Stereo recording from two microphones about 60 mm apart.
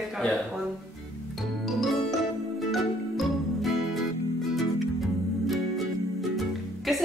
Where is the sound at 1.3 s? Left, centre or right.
Centre.